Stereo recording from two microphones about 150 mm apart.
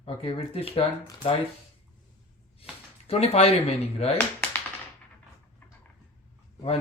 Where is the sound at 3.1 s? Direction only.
45° left (ahead or behind).